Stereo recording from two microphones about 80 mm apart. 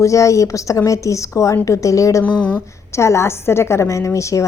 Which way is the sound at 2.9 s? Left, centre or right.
Left.